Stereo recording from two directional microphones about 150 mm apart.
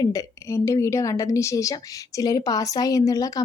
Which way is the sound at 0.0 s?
25° left (ahead or behind).